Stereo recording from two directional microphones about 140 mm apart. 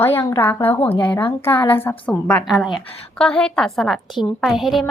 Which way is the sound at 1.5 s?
40° left (ahead or behind).